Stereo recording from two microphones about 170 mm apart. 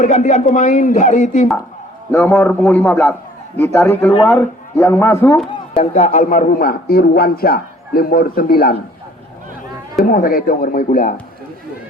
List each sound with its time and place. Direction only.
0.0 s speech: 45° left (ahead or behind)
2.1 s a man's voice: 10° left (ahead or behind)
5.7 s a man's voice: 45° left (ahead or behind); by 8.7 s 60° left (ahead or behind)
10.0 s a man's voice: 55° left (ahead or behind)